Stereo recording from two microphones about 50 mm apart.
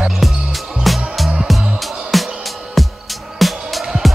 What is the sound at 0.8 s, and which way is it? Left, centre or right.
Music, centre.